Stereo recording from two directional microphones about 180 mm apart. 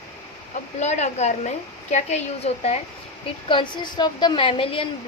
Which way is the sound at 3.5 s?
25° left (ahead or behind).